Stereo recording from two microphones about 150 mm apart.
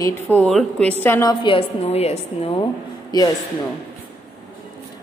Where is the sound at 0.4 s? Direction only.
5° left (ahead or behind).